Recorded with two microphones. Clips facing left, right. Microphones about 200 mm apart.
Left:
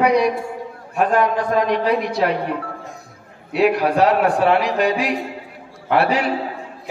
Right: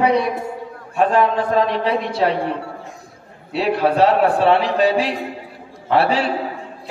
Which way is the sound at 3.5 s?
30° right (ahead or behind).